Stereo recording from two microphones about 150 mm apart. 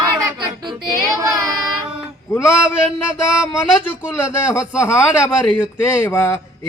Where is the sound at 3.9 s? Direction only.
15° left (ahead or behind).